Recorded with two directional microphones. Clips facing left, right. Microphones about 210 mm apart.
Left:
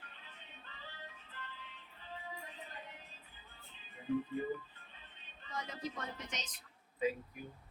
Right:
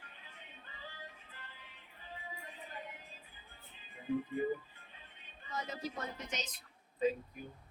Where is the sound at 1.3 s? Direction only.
10° right (ahead or behind).